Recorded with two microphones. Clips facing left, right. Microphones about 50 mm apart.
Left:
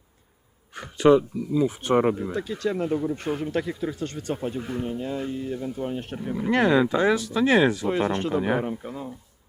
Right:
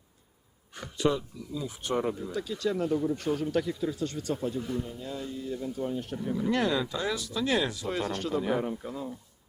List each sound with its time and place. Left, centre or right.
0.8 s speech: left
8.6 s speech: left